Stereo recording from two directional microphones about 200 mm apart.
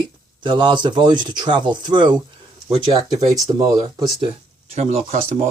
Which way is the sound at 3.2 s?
15° right (ahead or behind).